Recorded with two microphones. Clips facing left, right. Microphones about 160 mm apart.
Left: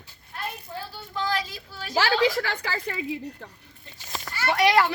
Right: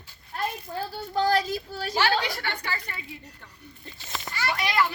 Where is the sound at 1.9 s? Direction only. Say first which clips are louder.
Left 4 dB; 90° left.